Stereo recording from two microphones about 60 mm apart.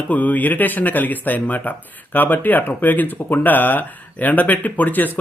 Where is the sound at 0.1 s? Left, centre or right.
Left.